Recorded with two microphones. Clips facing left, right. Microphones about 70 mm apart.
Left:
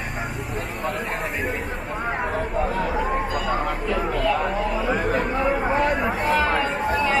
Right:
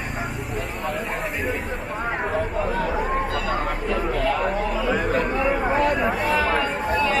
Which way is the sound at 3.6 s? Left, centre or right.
Centre.